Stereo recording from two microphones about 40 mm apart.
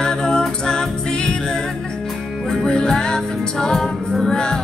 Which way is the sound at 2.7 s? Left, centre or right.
Centre.